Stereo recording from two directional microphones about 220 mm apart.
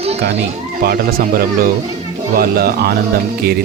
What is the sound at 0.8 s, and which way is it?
Speech, 45° right (ahead or behind).